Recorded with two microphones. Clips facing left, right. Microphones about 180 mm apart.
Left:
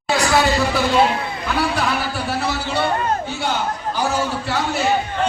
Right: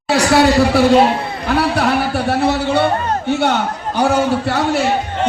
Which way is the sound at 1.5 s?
60° right (ahead or behind).